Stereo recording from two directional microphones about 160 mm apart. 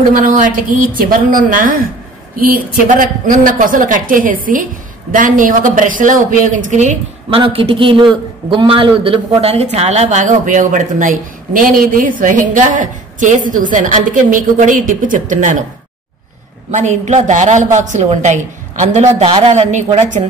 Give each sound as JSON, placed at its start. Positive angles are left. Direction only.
{"t": 0.1, "sound": "a woman's voice", "side_deg": -55}
{"t": 7.2, "sound": "a man's voice", "side_deg": -35}
{"t": 16.7, "sound": "a man's voice", "side_deg": -45}
{"t": 19.4, "sound": "a man's voice", "side_deg": -45}